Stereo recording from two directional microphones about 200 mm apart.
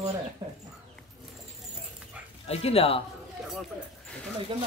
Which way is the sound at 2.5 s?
30° left (ahead or behind).